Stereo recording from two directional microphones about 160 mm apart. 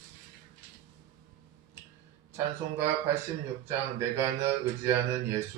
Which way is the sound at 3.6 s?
15° right (ahead or behind).